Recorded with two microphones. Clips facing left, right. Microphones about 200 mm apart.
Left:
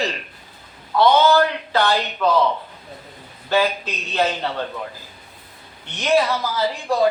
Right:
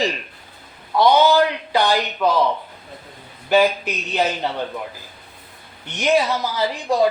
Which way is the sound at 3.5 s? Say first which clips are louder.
Right 3 dB; 15° right (ahead or behind).